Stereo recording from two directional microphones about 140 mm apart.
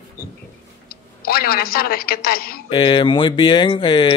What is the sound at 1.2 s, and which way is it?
A man's voice, 90° left.